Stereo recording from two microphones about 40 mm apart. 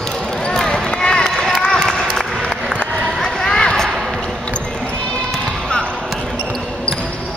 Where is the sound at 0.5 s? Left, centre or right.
Centre.